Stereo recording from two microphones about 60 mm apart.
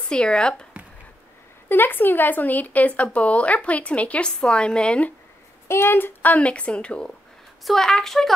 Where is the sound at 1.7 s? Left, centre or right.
Left; by 5.1 s centre.